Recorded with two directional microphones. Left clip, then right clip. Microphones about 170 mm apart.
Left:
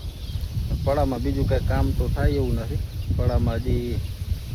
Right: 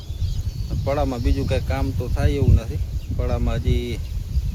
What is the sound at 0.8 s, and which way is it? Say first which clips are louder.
Speech: even; 25° right (ahead or behind).